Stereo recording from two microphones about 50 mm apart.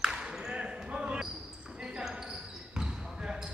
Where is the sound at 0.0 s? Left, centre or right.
Centre.